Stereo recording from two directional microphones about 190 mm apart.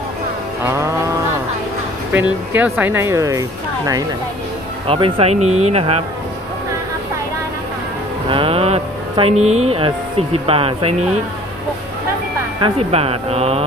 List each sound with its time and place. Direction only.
0.7 s speech: 15° right (ahead or behind)
2.1 s speech: 10° right (ahead or behind); by 6.0 s 35° right (ahead or behind)
8.3 s a sound: 30° right (ahead or behind)
9.4 s speech: 90° right
9.7 s speech: 30° right (ahead or behind)
12.5 s speech: 25° right (ahead or behind)